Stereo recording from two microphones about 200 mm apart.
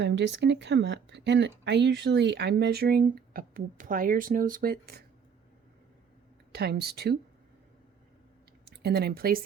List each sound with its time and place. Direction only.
0.0 s speech: 60° right (ahead or behind)
6.5 s speech: 55° right (ahead or behind)
8.8 s speech: 55° right (ahead or behind)